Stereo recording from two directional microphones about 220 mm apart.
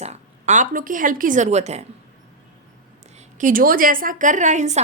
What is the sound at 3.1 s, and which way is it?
A woman's voice, 35° right (ahead or behind).